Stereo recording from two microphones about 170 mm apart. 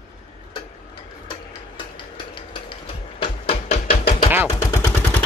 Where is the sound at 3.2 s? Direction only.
30° left (ahead or behind).